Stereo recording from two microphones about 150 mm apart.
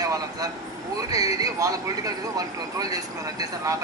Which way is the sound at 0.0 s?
25° right (ahead or behind).